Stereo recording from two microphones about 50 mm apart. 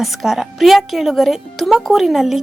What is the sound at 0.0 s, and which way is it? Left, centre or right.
Speech, centre.